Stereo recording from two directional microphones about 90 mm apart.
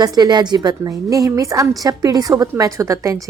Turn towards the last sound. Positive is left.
turn(degrees=-40)  # may be behind; listen again after turning